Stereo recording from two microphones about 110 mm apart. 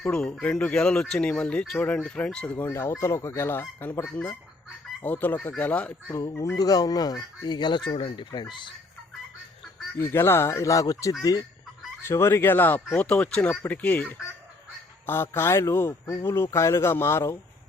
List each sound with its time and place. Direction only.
0.0 s speech: 10° left (ahead or behind)
2.6 s speech: 25° left (ahead or behind)
6.3 s speech: 30° left (ahead or behind); by 8.7 s 45° left (ahead or behind)
10.0 s speech: 20° left (ahead or behind)